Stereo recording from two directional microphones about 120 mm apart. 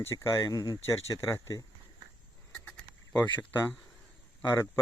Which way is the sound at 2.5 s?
15° left (ahead or behind).